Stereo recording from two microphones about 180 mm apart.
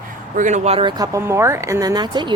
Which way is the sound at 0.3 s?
40° right (ahead or behind).